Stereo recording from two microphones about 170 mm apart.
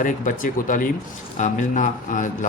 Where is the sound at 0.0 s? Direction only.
50° left (ahead or behind).